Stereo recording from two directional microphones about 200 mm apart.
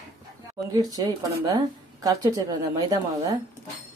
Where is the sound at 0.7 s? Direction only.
20° right (ahead or behind).